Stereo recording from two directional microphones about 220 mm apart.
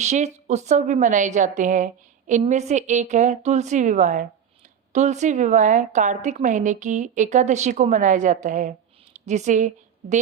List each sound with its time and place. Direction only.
0.0 s a woman's voice: 30° right (ahead or behind)